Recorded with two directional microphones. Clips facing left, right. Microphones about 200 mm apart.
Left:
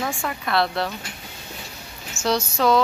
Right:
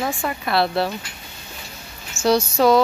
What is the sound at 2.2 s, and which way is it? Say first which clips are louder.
Speech: right 5 dB; 10° right (ahead or behind).